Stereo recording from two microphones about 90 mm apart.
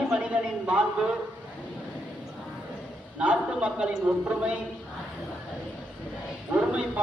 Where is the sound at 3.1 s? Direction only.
15° right (ahead or behind).